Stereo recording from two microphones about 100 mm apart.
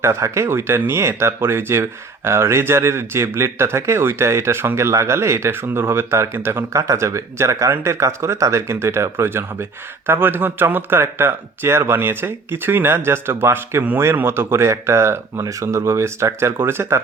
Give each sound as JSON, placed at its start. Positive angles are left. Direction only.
{"t": 0.0, "sound": "speech", "side_deg": -30}